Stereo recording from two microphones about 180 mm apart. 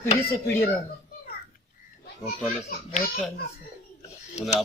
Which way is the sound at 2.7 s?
55° left (ahead or behind).